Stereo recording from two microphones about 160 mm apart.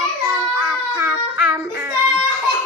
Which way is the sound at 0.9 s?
15° right (ahead or behind).